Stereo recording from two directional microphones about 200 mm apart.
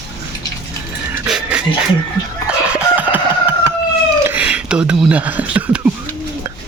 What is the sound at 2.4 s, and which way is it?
Chicken, 5° right (ahead or behind).